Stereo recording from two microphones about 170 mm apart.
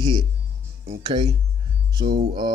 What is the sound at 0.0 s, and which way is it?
Speech, 25° right (ahead or behind).